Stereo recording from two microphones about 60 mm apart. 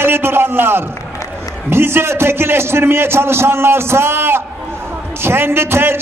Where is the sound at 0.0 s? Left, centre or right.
Right.